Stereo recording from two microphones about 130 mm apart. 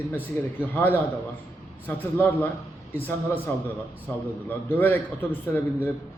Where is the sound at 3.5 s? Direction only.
15° left (ahead or behind).